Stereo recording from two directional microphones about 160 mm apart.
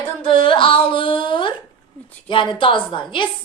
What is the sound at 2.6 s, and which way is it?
Speech, 30° left (ahead or behind).